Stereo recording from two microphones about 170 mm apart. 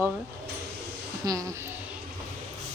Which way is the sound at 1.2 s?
20° right (ahead or behind).